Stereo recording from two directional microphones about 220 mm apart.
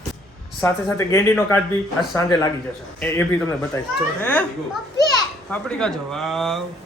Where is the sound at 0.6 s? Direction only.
10° left (ahead or behind).